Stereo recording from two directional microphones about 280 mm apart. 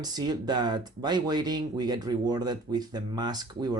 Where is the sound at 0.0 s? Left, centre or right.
Centre.